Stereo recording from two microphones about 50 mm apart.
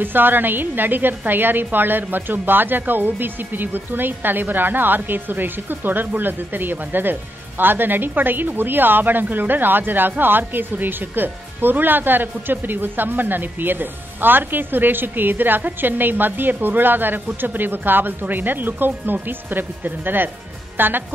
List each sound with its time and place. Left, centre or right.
0.0 s a woman's voice: right